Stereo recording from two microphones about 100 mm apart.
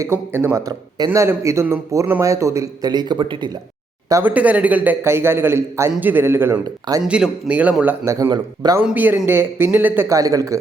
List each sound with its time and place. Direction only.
0.0 s a man's voice: 25° right (ahead or behind)
0.6 s a man's voice: 40° right (ahead or behind)
1.2 s a man's voice: 30° right (ahead or behind)
2.9 s speech: 45° right (ahead or behind)
4.2 s a man's voice: 15° right (ahead or behind)
7.0 s a man's voice: 10° right (ahead or behind)
8.0 s a man's voice: 30° right (ahead or behind)
8.3 s a man's voice: 40° right (ahead or behind)
8.8 s a man's voice: 15° right (ahead or behind)
10.1 s a man's voice: 35° right (ahead or behind)